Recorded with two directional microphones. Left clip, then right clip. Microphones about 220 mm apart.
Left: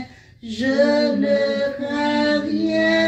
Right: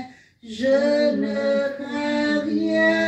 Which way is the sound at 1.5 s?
40° left (ahead or behind).